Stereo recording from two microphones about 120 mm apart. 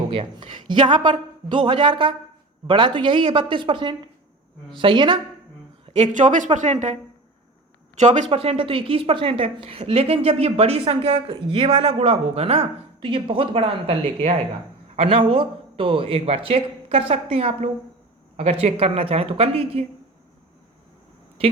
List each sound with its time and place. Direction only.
0.1 s a woman's voice: 45° right (ahead or behind)
5.8 s a woman's voice: 70° right (ahead or behind); by 8.3 s 85° right
8.3 s a woman's voice: 50° right (ahead or behind)